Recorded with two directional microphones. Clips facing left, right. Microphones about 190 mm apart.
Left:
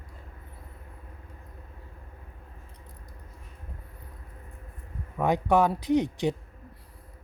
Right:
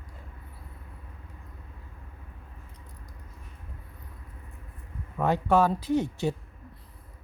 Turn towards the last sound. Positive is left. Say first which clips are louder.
# left 2 dB
turn(degrees=15)  # may be behind; listen again after turning